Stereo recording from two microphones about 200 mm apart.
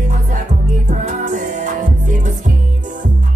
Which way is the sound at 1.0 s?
40° right (ahead or behind).